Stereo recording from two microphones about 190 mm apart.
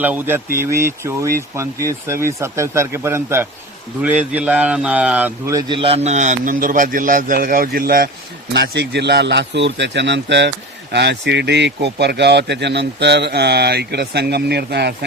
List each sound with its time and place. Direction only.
0.0 s a man's voice: 10° right (ahead or behind); by 8.1 s 50° right (ahead or behind)
8.5 s speech: 60° right (ahead or behind)